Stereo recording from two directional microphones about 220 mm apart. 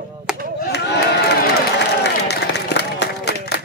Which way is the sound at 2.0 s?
50° left (ahead or behind).